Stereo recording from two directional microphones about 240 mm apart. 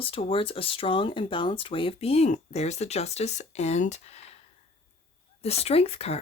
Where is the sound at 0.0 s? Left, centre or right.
Left.